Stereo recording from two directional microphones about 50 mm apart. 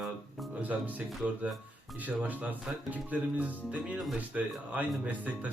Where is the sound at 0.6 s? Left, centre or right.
Right.